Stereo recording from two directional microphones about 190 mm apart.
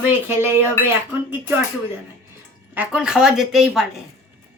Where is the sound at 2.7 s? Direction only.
5° right (ahead or behind).